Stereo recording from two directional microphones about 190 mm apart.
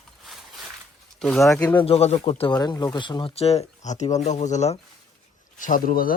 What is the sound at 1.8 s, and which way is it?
Speech, 30° left (ahead or behind).